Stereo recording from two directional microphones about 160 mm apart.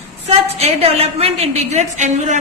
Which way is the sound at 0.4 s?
40° right (ahead or behind).